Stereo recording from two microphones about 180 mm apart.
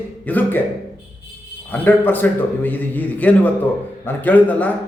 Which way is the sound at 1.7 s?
10° left (ahead or behind).